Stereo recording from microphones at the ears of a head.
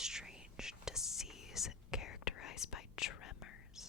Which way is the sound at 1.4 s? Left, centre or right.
Left.